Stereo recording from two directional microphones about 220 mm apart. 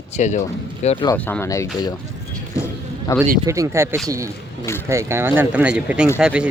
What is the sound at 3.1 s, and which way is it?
Speech, 15° left (ahead or behind).